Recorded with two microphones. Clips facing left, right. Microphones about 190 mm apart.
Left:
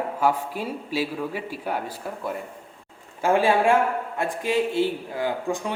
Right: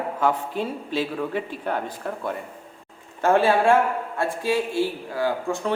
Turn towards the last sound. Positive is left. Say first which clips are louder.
# right 2 dB
turn(degrees=15)  # may be behind; listen again after turning